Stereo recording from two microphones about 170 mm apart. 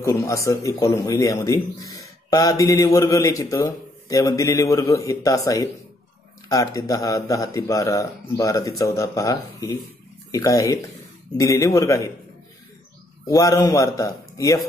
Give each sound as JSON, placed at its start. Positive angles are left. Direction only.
{"t": 0.0, "sound": "speech", "side_deg": 15}
{"t": 13.3, "sound": "speech", "side_deg": 20}